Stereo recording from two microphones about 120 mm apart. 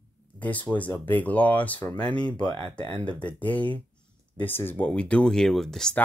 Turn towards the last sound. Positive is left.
turn(degrees=5)  # may be behind; listen again after turning